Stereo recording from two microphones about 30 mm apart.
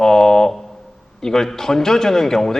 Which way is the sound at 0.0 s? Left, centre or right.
Centre.